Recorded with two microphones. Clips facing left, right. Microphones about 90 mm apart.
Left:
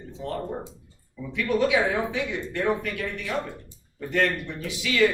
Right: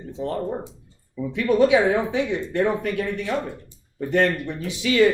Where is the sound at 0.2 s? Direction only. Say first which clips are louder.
Right 5 dB; 40° right (ahead or behind).